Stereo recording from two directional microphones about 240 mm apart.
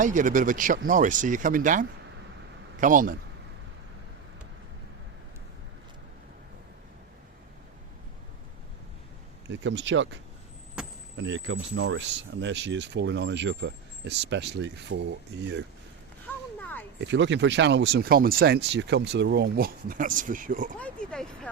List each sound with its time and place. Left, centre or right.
0.0 s speech: right
9.5 s speech: right
10.8 s vehicle: centre
11.2 s speech: right
16.2 s a sound: centre
17.0 s speech: right
20.7 s speech: centre